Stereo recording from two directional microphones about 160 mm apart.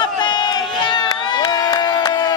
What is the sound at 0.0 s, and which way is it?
Crowd, 25° left (ahead or behind).